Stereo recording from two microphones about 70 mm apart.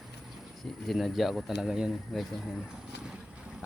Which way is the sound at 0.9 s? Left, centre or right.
Centre.